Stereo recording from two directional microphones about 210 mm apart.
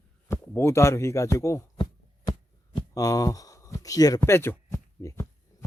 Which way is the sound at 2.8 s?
15° left (ahead or behind).